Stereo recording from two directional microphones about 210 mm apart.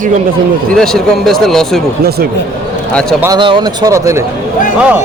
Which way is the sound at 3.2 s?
20° right (ahead or behind).